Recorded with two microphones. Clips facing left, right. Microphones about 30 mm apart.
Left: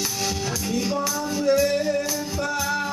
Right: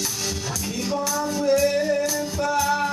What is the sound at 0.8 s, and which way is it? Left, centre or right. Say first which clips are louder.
Music: right 1 dB; centre.